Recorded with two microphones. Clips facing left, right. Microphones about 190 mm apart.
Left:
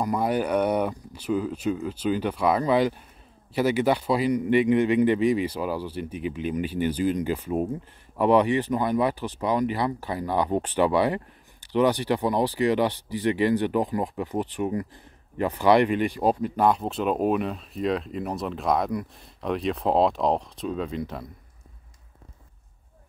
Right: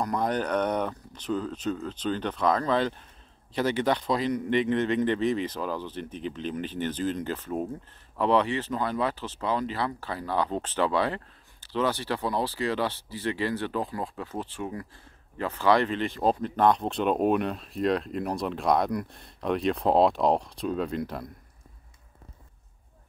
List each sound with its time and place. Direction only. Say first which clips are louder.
0.0 s speech: left 3 dB; 10° left (ahead or behind)